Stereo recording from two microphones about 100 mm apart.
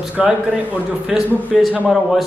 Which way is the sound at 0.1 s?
15° right (ahead or behind).